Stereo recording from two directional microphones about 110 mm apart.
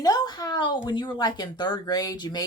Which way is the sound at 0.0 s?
35° left (ahead or behind).